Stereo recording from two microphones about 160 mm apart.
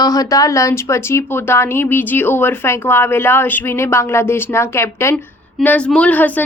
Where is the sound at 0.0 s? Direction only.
20° left (ahead or behind).